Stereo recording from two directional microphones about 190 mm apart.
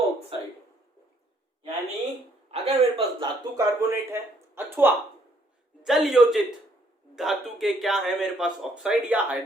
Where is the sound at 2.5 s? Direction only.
30° right (ahead or behind).